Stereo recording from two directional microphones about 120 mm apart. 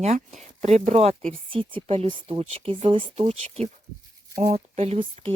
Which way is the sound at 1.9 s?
50° right (ahead or behind).